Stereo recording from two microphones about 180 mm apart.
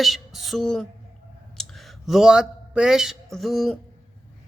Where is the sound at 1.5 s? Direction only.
Centre (ahead or behind).